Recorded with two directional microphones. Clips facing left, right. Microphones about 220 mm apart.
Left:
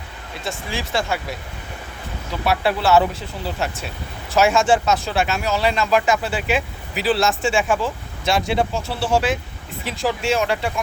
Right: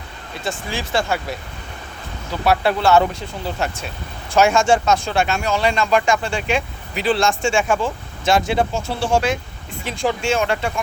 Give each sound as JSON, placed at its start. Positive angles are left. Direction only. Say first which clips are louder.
{"t": 0.4, "sound": "speech", "louder": "right 2 dB", "side_deg": 0}
{"t": 2.5, "sound": "speech", "louder": "right 2 dB", "side_deg": 0}